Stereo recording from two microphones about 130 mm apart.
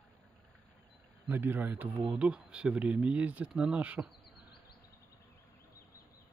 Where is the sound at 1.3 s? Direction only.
15° right (ahead or behind).